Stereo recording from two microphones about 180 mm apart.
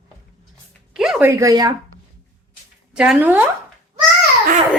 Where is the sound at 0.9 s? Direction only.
5° right (ahead or behind).